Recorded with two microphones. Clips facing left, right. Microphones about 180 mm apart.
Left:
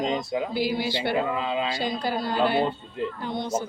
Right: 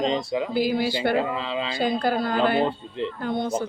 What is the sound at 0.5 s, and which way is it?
Speech, 50° right (ahead or behind).